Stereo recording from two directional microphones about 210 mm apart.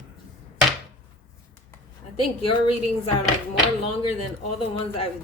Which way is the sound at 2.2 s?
25° left (ahead or behind).